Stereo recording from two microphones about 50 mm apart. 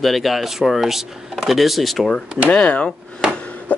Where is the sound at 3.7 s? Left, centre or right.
Left.